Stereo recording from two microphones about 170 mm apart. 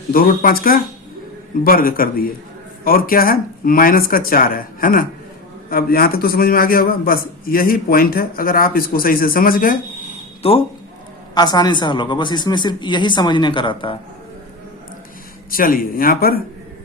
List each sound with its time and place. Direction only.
0.1 s a man's voice: 60° left (ahead or behind)
10.4 s speech: 35° left (ahead or behind)
11.3 s speech: 25° left (ahead or behind)
15.4 s a man's voice: 55° left (ahead or behind)